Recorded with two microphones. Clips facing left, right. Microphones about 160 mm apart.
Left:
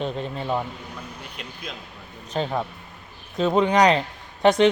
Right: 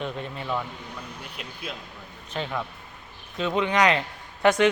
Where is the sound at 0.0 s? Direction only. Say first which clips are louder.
Left 4 dB; 30° left (ahead or behind).